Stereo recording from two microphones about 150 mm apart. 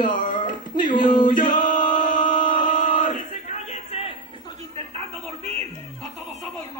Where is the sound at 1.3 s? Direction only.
60° left (ahead or behind).